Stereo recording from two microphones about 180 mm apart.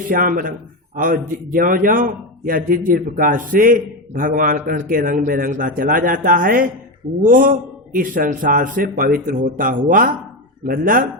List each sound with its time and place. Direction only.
0.1 s a man's voice: 50° right (ahead or behind)